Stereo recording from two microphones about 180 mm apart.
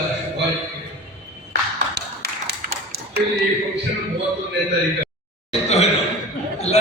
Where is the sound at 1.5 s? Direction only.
65° right (ahead or behind).